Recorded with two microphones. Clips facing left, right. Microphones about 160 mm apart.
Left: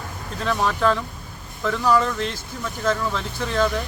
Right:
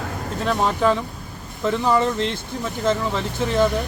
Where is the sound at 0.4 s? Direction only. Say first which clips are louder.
Right 1 dB; 15° right (ahead or behind).